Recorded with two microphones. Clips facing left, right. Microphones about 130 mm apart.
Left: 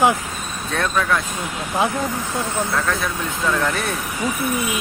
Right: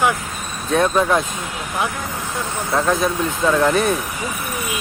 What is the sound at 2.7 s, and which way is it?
Speech, 20° right (ahead or behind).